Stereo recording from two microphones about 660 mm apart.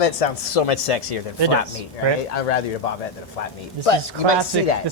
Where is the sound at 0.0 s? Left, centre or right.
Left.